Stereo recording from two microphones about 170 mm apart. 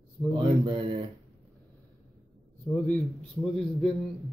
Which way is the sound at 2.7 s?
10° left (ahead or behind).